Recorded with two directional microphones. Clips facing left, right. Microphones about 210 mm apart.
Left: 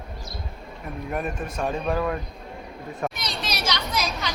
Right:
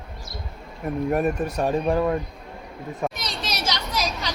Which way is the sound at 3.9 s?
35° right (ahead or behind).